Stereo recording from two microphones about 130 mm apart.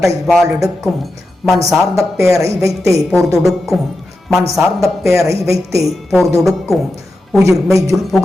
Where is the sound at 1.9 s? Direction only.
25° right (ahead or behind).